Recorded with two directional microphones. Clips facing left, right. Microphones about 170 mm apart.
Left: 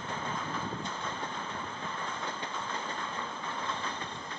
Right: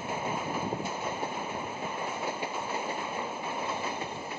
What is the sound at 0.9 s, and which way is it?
Train, 10° right (ahead or behind).